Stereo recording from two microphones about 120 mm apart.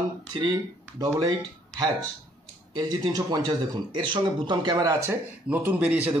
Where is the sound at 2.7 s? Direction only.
35° right (ahead or behind).